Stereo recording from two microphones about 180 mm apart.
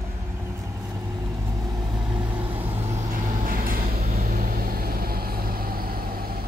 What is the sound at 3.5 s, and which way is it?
Vehicle, 55° right (ahead or behind).